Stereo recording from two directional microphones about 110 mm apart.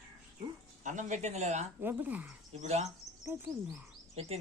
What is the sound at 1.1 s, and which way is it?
Speech, 90° right.